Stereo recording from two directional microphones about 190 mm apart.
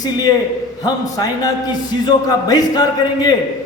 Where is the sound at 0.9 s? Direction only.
20° left (ahead or behind).